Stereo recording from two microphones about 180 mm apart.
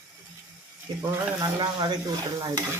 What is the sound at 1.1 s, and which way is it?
Speech, 20° right (ahead or behind).